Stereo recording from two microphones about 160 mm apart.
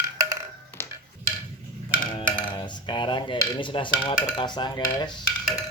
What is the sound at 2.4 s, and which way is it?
Dishes, 30° left (ahead or behind).